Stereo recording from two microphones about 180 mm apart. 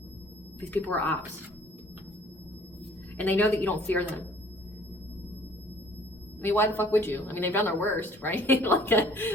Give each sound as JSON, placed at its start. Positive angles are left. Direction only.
{"t": 0.7, "sound": "speech", "side_deg": 10}
{"t": 3.2, "sound": "speech", "side_deg": 10}
{"t": 6.4, "sound": "speech", "side_deg": 10}